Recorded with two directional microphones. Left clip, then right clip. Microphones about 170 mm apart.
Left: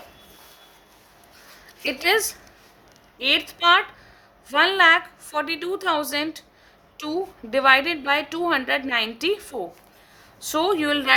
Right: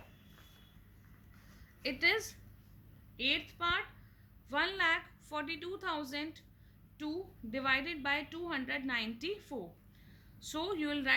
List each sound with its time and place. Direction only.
1.8 s a woman's voice: 55° left (ahead or behind)